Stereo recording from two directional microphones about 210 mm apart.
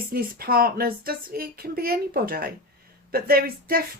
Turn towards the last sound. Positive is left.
turn(degrees=-45)  # may be behind; listen again after turning